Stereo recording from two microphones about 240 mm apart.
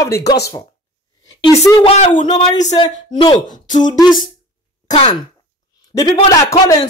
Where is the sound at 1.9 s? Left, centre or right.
Left.